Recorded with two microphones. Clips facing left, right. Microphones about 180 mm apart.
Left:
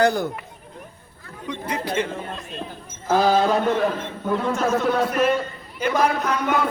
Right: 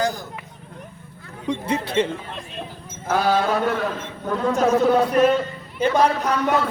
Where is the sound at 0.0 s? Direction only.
65° left (ahead or behind).